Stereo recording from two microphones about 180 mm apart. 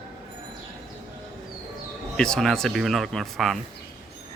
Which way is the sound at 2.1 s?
5° left (ahead or behind).